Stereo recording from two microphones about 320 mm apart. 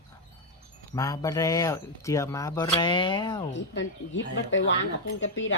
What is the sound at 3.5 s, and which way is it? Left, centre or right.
Speech, left.